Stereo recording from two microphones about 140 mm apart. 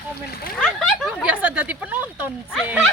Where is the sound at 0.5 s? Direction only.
5° left (ahead or behind).